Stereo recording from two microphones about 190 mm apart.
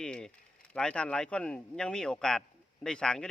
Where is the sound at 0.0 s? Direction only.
5° left (ahead or behind).